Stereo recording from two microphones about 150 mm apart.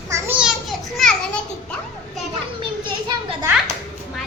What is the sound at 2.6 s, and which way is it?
Children playing, 35° right (ahead or behind).